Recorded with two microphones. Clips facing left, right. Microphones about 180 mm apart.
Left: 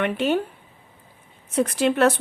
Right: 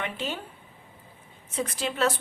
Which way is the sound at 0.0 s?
60° left (ahead or behind).